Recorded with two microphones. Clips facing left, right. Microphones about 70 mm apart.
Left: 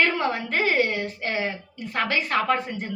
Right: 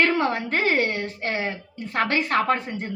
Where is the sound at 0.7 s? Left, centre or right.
Right.